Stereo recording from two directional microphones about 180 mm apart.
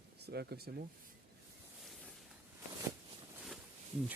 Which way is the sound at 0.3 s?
60° right (ahead or behind).